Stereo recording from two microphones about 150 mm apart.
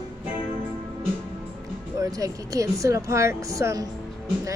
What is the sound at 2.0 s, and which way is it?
Speech, 20° right (ahead or behind).